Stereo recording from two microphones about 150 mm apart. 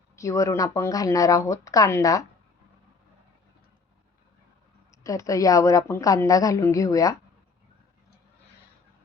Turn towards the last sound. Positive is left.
turn(degrees=20)  # may be behind; listen again after turning